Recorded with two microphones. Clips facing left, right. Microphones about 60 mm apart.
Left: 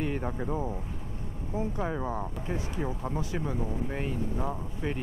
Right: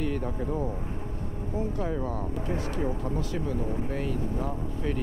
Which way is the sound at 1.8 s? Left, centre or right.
Centre.